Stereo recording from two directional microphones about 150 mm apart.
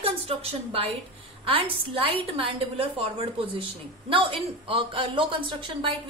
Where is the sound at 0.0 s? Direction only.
40° right (ahead or behind).